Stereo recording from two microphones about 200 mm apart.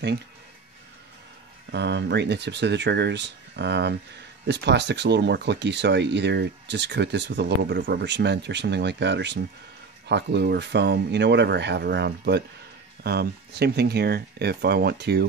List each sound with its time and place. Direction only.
1.7 s speech: 60° right (ahead or behind)